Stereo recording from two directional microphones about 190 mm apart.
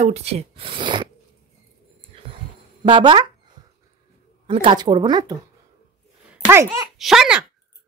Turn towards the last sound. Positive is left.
turn(degrees=-5)  # may be behind; listen again after turning